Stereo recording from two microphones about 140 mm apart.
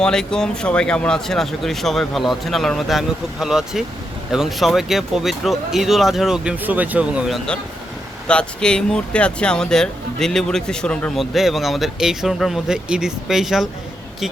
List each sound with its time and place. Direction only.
0.0 s speech: 5° left (ahead or behind)